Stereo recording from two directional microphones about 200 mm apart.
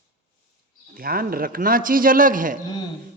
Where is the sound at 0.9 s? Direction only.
45° right (ahead or behind).